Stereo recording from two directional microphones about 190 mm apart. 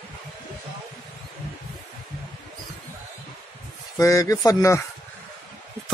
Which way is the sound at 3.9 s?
15° left (ahead or behind).